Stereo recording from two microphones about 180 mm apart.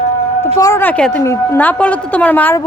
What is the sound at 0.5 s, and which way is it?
A woman's voice, 20° left (ahead or behind).